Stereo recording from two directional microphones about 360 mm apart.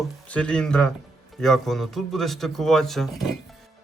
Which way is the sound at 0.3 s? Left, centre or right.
Centre.